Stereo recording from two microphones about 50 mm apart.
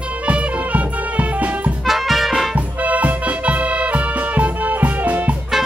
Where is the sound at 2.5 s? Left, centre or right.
Right.